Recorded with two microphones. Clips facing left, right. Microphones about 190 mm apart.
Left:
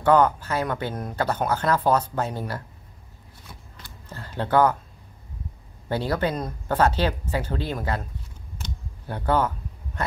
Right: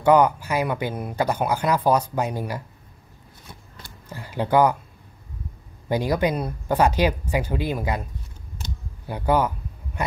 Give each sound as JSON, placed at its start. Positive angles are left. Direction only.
{"t": 0.0, "sound": "speech", "side_deg": -10}
{"t": 4.1, "sound": "speech", "side_deg": -10}
{"t": 5.9, "sound": "speech", "side_deg": -15}